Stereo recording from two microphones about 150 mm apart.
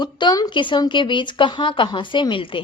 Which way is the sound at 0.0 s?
30° left (ahead or behind).